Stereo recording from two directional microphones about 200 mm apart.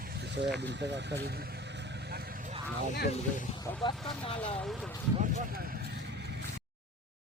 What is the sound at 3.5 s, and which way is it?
Speech, 20° left (ahead or behind).